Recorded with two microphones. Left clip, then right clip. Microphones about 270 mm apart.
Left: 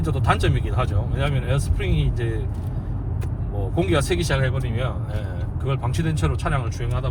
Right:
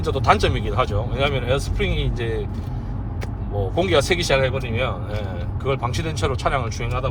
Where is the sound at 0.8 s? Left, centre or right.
Right.